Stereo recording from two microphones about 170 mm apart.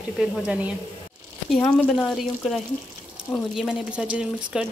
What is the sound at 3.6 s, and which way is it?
Speech, 5° right (ahead or behind).